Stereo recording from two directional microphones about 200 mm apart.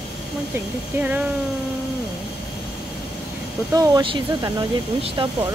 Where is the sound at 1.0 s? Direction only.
10° right (ahead or behind).